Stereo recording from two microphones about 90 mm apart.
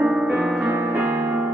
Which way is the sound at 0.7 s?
20° right (ahead or behind).